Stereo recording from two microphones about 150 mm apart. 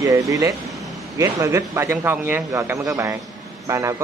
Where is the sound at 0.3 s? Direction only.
25° right (ahead or behind).